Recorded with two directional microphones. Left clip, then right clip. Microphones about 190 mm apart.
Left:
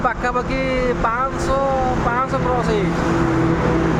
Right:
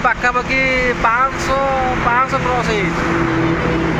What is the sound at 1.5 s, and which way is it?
Speech, 15° left (ahead or behind).